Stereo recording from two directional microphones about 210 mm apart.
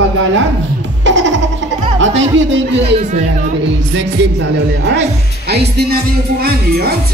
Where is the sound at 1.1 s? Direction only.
60° right (ahead or behind).